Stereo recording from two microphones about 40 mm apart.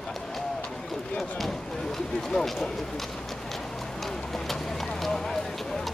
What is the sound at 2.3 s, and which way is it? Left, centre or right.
Speech, centre.